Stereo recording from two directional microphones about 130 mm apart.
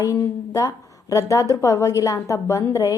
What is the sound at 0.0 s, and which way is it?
A woman's voice, 25° left (ahead or behind).